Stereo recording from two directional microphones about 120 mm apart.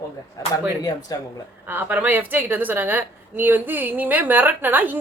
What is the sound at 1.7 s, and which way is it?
A woman's voice, 15° right (ahead or behind).